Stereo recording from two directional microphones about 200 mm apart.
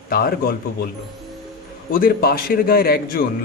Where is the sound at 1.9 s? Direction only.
45° left (ahead or behind).